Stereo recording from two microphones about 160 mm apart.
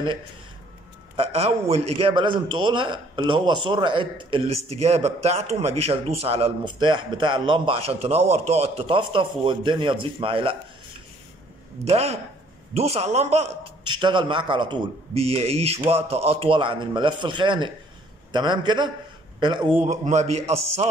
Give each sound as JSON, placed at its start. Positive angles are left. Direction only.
{"t": 1.1, "sound": "a man's voice", "side_deg": -35}
{"t": 11.8, "sound": "a man's voice", "side_deg": -40}
{"t": 13.8, "sound": "a man's voice", "side_deg": -30}